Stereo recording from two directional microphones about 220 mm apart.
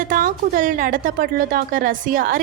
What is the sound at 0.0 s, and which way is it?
A woman's voice, 40° right (ahead or behind).